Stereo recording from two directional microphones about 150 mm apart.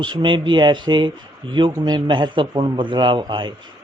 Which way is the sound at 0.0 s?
30° right (ahead or behind).